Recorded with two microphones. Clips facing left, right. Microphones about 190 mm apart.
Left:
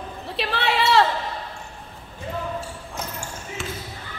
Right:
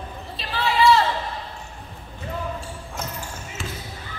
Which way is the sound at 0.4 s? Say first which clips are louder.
Right 2 dB; 70° left (ahead or behind).